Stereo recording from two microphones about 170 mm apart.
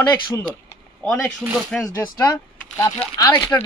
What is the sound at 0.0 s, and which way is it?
Speech, 15° left (ahead or behind).